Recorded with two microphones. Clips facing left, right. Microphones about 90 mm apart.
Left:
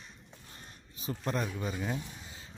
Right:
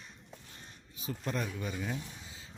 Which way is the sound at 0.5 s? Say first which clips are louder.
Left 1 dB; 35° left (ahead or behind).